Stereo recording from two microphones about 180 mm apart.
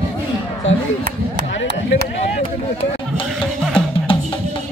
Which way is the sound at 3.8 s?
30° left (ahead or behind).